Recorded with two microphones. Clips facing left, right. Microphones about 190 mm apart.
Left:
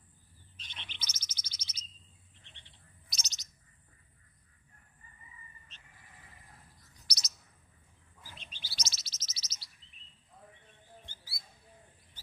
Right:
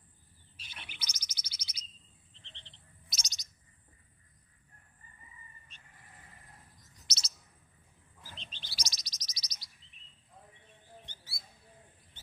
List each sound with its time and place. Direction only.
0.5 s bird: 10° right (ahead or behind)
2.3 s frog: 10° left (ahead or behind)
3.1 s bird: 10° right (ahead or behind)
7.1 s chirp: 30° right (ahead or behind)
8.2 s chirp: 10° left (ahead or behind)
8.7 s chirp: 15° right (ahead or behind)
11.0 s a sound: 20° right (ahead or behind)